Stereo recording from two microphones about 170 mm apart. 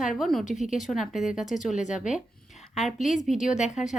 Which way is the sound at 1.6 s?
45° left (ahead or behind).